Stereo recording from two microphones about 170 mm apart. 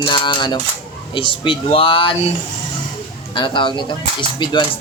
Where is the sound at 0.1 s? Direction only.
25° left (ahead or behind).